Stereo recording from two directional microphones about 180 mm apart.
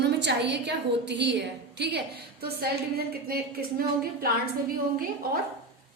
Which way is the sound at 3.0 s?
55° right (ahead or behind).